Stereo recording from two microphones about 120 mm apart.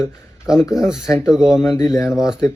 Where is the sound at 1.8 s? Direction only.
30° left (ahead or behind).